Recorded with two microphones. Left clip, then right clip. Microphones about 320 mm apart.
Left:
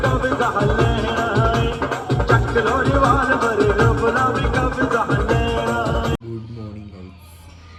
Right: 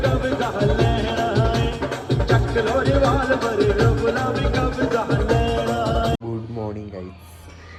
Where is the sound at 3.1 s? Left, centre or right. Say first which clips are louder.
Left 3 dB; centre.